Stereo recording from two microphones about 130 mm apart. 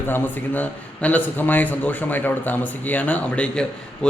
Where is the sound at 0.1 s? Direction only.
15° left (ahead or behind).